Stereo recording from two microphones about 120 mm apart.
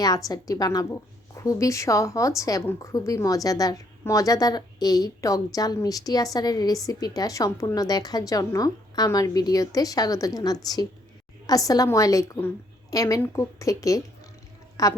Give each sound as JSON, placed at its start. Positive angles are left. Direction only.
{"t": 0.0, "sound": "a woman's voice", "side_deg": 30}